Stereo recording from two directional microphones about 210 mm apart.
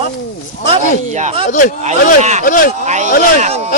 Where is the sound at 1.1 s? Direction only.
30° right (ahead or behind).